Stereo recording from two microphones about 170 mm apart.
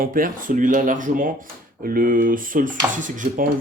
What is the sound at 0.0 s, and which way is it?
Speech, 55° right (ahead or behind).